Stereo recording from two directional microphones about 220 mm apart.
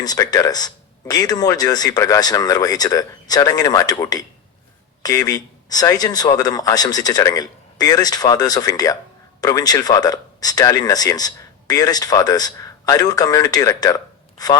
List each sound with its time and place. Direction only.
0.0 s speech: 15° left (ahead or behind)